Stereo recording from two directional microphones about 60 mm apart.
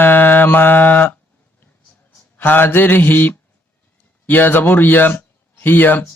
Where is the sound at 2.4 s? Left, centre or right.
Left.